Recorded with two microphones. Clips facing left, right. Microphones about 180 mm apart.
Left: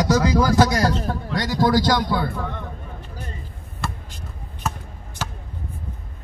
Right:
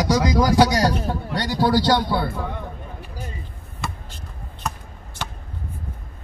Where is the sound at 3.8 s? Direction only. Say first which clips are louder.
Left 1 dB; centre (ahead or behind).